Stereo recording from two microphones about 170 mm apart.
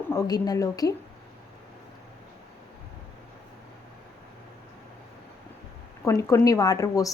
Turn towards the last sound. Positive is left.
turn(degrees=20)  # may be behind; listen again after turning